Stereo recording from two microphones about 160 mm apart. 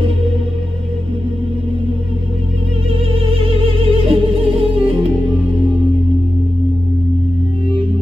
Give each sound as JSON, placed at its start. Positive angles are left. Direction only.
{"t": 2.9, "sound": "music", "side_deg": -35}